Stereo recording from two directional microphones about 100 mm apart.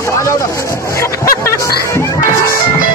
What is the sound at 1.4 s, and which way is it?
Music, 25° left (ahead or behind).